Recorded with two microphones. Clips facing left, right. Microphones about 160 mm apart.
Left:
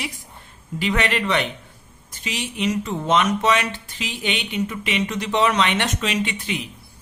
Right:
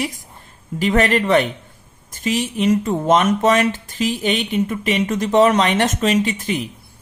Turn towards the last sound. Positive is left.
turn(degrees=-45)  # may be behind; listen again after turning